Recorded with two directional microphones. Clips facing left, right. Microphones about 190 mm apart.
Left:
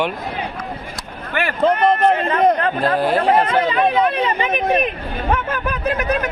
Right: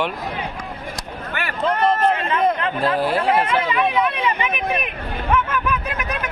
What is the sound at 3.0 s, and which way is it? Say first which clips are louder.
Speech: left 3 dB; 45° left (ahead or behind).